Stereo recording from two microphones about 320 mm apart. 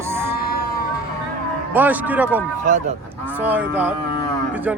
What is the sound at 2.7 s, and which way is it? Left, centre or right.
Speech, right.